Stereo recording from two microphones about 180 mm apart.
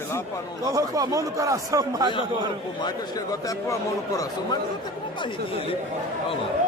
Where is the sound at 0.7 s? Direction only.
20° right (ahead or behind).